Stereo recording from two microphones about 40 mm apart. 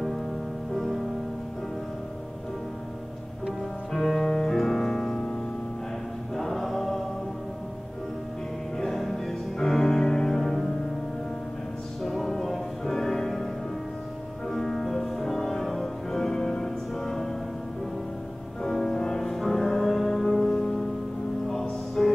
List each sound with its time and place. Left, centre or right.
0.7 s music: centre
3.9 s music: centre
6.3 s choir: centre
8.7 s music: centre
12.0 s music: centre
14.5 s music: centre
18.6 s music: centre
20.5 s music: centre
21.5 s music: centre